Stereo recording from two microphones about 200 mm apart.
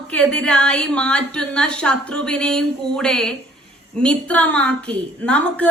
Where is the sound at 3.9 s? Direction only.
5° left (ahead or behind).